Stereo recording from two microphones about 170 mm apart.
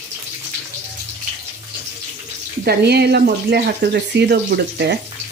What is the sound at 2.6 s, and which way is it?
Speech, 70° right (ahead or behind).